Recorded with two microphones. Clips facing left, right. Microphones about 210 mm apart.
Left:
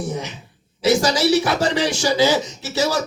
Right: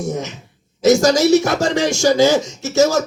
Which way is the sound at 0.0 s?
45° right (ahead or behind).